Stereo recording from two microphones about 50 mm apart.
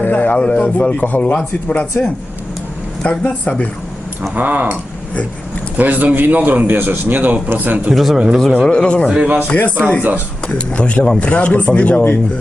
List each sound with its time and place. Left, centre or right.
0.0 s a man's voice: left
0.3 s a man's voice: left
2.0 s speech: left
3.0 s a man's voice: left
4.4 s a man's voice: right
7.9 s speech: centre
8.6 s a man's voice: centre
9.1 s a man's voice: right
9.5 s a man's voice: left